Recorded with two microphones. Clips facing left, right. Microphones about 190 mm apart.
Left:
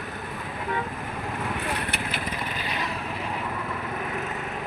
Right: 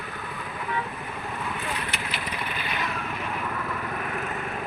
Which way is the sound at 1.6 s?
60° left (ahead or behind).